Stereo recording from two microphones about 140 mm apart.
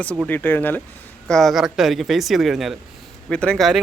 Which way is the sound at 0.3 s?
15° left (ahead or behind).